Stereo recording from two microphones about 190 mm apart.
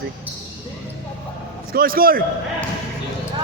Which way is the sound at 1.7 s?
50° right (ahead or behind).